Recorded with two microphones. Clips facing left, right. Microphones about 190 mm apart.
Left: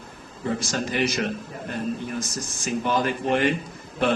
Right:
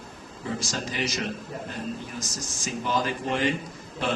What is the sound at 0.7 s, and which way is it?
Speech, 55° left (ahead or behind).